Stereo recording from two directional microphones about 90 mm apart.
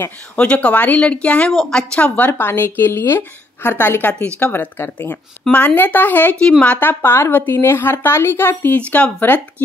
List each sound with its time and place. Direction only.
0.4 s speech: 15° left (ahead or behind)
2.0 s a woman's voice: 20° left (ahead or behind)